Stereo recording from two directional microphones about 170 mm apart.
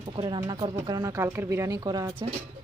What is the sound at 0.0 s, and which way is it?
Speech, 30° right (ahead or behind).